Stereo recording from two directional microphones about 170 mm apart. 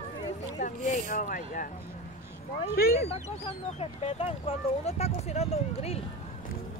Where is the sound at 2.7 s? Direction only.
60° left (ahead or behind).